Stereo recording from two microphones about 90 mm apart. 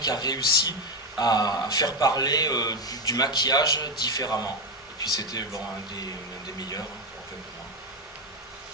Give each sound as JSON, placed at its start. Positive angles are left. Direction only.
{"t": 0.0, "sound": "a man's voice", "side_deg": 45}
{"t": 6.6, "sound": "a man's voice", "side_deg": 45}